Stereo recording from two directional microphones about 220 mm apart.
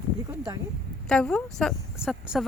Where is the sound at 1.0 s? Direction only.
5° left (ahead or behind).